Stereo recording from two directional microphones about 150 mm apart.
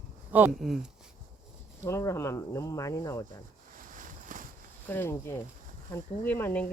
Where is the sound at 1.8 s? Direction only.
20° left (ahead or behind).